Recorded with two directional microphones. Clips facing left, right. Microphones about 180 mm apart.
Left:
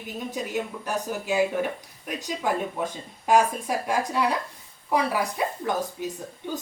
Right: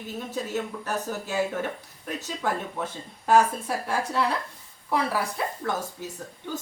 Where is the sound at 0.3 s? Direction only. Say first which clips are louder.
Left 1 dB; 15° left (ahead or behind).